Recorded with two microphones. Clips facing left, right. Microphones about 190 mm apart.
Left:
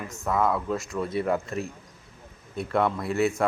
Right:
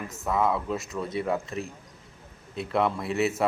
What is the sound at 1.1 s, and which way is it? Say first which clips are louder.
Speech: left 2 dB; 20° right (ahead or behind).